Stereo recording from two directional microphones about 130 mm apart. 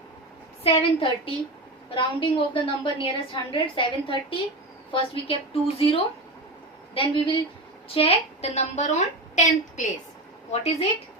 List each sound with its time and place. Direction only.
0.6 s a woman's voice: 45° left (ahead or behind); by 9.8 s 65° left (ahead or behind)
10.5 s a woman's voice: 55° left (ahead or behind)